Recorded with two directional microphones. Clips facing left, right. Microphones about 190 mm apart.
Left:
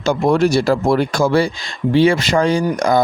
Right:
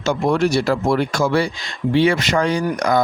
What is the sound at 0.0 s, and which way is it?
Speech, 35° left (ahead or behind).